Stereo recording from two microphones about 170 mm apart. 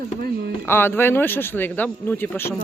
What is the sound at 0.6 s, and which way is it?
Speech, 10° left (ahead or behind).